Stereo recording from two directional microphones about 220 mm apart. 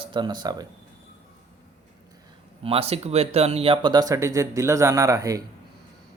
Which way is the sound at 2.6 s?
25° right (ahead or behind).